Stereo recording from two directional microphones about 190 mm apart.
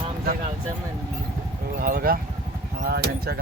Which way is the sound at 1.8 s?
50° right (ahead or behind).